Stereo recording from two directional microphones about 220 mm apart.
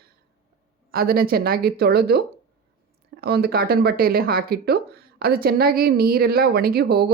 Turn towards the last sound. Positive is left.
turn(degrees=-45)  # may be behind; listen again after turning